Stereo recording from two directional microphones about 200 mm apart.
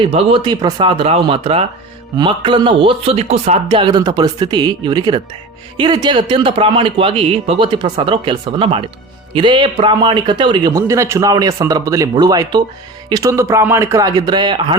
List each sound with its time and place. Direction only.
0.0 s a man's voice: 30° right (ahead or behind)